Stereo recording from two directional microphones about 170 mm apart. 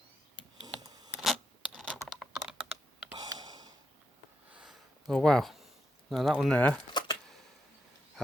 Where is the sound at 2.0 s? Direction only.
Centre (ahead or behind).